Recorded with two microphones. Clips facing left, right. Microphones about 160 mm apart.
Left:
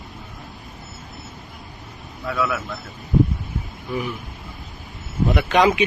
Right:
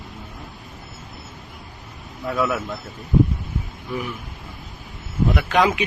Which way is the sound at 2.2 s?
30° right (ahead or behind).